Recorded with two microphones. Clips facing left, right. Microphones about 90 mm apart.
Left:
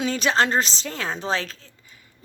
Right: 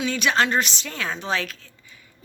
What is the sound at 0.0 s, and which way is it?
A woman's voice, 35° left (ahead or behind).